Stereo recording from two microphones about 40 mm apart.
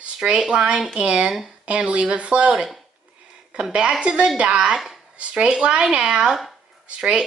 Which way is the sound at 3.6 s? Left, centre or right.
Right.